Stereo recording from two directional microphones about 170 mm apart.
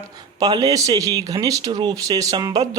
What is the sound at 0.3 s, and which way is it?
Speech, 20° right (ahead or behind).